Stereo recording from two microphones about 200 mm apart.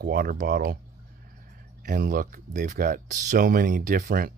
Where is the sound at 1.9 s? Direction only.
45° right (ahead or behind).